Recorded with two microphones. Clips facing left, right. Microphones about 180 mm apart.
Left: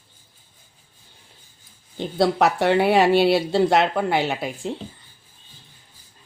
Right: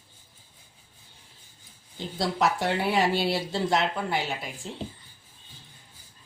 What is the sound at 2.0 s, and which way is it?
Speech, 65° left (ahead or behind).